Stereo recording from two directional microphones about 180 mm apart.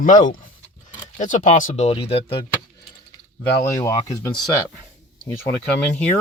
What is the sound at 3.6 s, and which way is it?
Speech, 15° left (ahead or behind).